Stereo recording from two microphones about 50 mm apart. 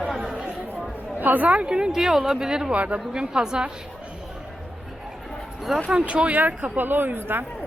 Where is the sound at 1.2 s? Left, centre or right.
Right.